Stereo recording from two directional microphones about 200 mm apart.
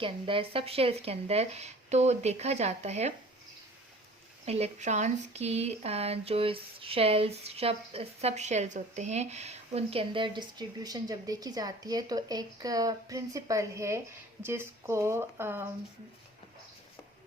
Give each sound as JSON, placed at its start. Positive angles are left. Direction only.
{"t": 0.0, "sound": "speech", "side_deg": -25}
{"t": 4.4, "sound": "speech", "side_deg": -30}